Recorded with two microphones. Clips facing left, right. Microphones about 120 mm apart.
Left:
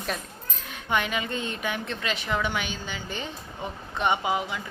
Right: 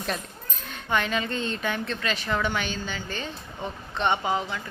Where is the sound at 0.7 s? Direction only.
15° left (ahead or behind).